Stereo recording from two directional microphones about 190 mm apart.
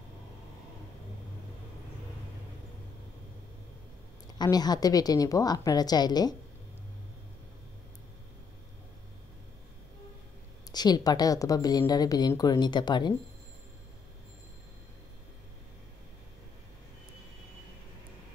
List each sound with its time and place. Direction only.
4.4 s speech: 20° left (ahead or behind)
10.7 s speech: 20° left (ahead or behind)